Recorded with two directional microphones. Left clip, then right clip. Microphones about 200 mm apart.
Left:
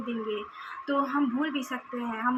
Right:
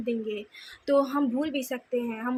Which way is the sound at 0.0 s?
40° right (ahead or behind).